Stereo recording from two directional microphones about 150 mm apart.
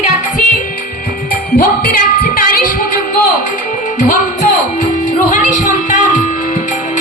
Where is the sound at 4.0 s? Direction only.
60° left (ahead or behind).